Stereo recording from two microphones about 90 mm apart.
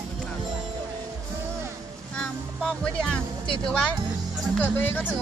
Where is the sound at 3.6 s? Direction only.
10° left (ahead or behind).